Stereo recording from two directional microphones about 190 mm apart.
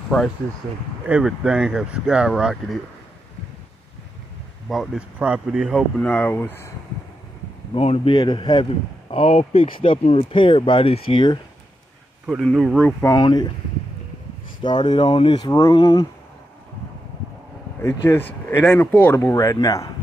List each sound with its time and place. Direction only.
1.0 s speech: 5° right (ahead or behind)
4.6 s speech: 5° right (ahead or behind)
7.7 s speech: 30° left (ahead or behind)
12.3 s speech: centre (ahead or behind)
13.0 s speech: 20° left (ahead or behind)
14.6 s speech: 25° left (ahead or behind)
17.8 s speech: 10° left (ahead or behind)